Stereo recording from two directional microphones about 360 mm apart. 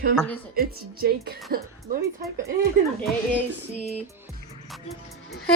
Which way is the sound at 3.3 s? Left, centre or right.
Centre.